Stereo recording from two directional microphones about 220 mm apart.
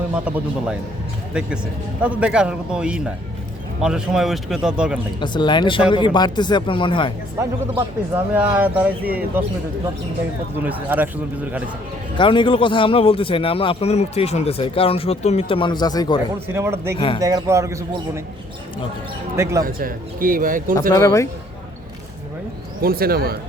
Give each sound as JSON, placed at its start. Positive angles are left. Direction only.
{"t": 0.1, "sound": "a man's voice", "side_deg": -5}
{"t": 5.2, "sound": "a man's voice", "side_deg": 20}
{"t": 7.3, "sound": "a man's voice", "side_deg": -10}
{"t": 10.6, "sound": "a man's voice", "side_deg": -10}
{"t": 12.1, "sound": "a man's voice", "side_deg": 20}
{"t": 16.5, "sound": "a man's voice", "side_deg": -10}
{"t": 19.4, "sound": "a man's voice", "side_deg": -10}
{"t": 19.6, "sound": "a man's voice", "side_deg": -40}
{"t": 20.9, "sound": "speech", "side_deg": 15}
{"t": 22.8, "sound": "speech", "side_deg": -45}